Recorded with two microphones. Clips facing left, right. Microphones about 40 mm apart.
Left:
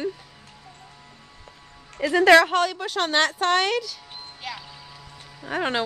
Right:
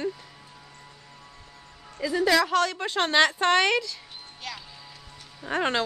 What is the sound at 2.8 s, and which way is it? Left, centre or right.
Speech, centre.